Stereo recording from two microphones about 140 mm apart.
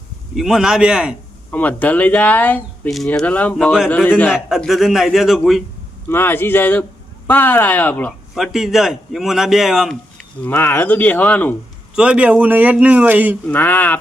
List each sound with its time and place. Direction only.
0.3 s a man's voice: 5° right (ahead or behind)
1.5 s speech: 10° left (ahead or behind)
4.3 s a man's voice: centre (ahead or behind)
6.1 s speech: 15° left (ahead or behind)
8.4 s a man's voice: centre (ahead or behind)
10.4 s speech: 15° left (ahead or behind)
11.9 s speech: 10° right (ahead or behind)
13.5 s speech: 15° left (ahead or behind)